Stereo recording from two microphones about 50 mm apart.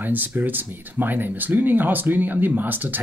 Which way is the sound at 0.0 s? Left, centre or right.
Right.